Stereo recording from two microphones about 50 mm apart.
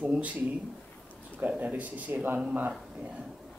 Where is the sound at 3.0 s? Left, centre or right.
Centre.